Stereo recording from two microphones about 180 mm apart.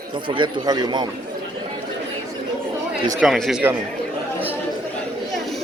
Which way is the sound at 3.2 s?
Centre (ahead or behind).